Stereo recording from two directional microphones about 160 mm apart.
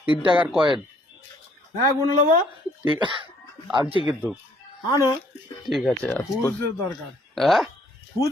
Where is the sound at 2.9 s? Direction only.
30° right (ahead or behind).